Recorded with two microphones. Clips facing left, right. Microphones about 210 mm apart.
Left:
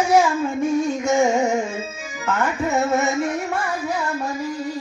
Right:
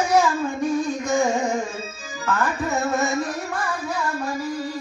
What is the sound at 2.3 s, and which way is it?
Music, 25° left (ahead or behind).